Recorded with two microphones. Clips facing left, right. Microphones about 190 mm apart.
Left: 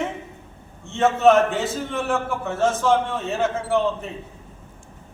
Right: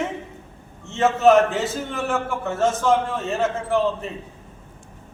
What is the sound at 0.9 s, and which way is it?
A man's voice, centre (ahead or behind).